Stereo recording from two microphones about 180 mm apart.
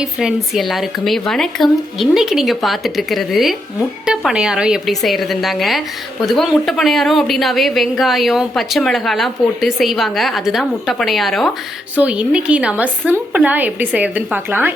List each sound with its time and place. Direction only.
0.0 s a woman's voice: 5° right (ahead or behind)